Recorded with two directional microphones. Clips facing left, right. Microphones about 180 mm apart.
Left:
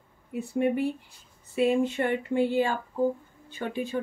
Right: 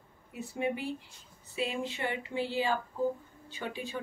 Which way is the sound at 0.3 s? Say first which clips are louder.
Left 7 dB; 55° left (ahead or behind).